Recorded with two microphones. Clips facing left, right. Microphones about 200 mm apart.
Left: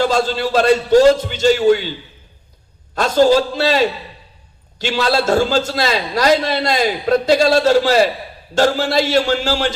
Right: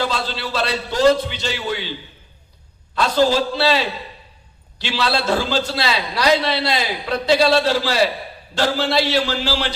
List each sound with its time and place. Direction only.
0.0 s a man's voice: 45° left (ahead or behind)
2.9 s a sound: 45° left (ahead or behind)
3.6 s a man's voice: 45° left (ahead or behind)